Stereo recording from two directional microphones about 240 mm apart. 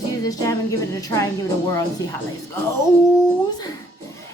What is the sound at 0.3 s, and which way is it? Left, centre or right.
A woman's voice, centre.